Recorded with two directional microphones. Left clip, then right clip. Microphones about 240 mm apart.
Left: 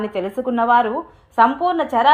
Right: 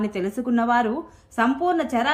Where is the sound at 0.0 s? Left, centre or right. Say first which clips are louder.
Left 4 dB; centre.